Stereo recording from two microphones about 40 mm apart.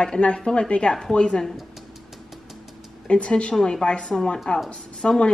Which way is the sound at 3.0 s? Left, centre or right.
Left.